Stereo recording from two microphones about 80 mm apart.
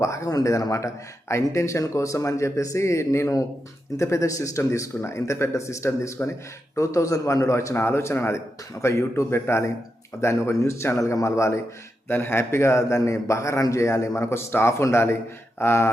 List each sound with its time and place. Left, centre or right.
0.0 s a man's voice: left
1.3 s a man's voice: left